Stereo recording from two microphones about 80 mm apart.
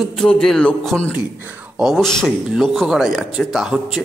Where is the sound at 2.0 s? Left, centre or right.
Centre.